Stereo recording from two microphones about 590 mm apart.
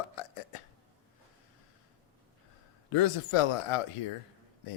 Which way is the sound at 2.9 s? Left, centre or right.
Left.